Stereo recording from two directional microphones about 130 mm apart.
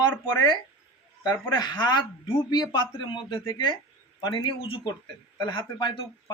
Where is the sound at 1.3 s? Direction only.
35° left (ahead or behind).